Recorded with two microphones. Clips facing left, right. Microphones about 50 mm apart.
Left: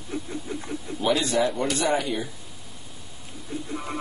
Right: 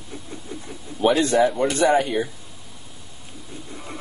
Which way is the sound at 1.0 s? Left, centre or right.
Right.